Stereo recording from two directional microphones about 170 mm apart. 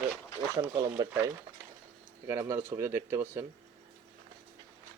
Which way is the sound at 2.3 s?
15° right (ahead or behind).